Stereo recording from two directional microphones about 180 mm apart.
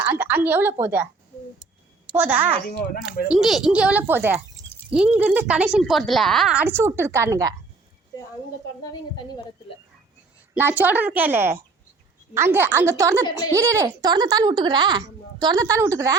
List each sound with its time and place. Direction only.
0.0 s speech: 10° right (ahead or behind)
2.1 s speech: 10° right (ahead or behind)
2.6 s speech: 55° left (ahead or behind)
3.2 s speech: centre (ahead or behind); by 7.5 s 15° right (ahead or behind)
10.5 s speech: 10° right (ahead or behind)